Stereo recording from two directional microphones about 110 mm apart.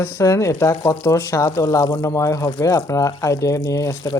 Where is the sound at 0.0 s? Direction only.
30° left (ahead or behind).